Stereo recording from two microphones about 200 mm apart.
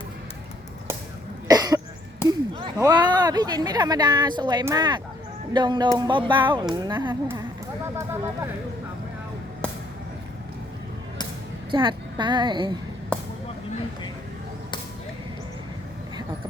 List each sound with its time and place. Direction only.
1.5 s cough: 20° right (ahead or behind)
2.2 s a sound: 25° right (ahead or behind)
2.8 s speech: 20° right (ahead or behind)
7.1 s speech: 10° right (ahead or behind)
7.9 s vehicle: 15° right (ahead or behind)
11.7 s speech: 25° right (ahead or behind)